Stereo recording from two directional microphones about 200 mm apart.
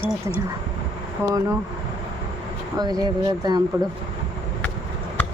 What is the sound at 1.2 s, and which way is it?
Speech, 15° right (ahead or behind).